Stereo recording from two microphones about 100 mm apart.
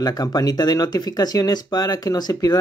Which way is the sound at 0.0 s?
40° left (ahead or behind).